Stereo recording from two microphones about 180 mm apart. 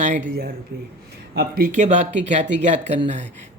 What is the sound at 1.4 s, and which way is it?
Speech, 55° right (ahead or behind).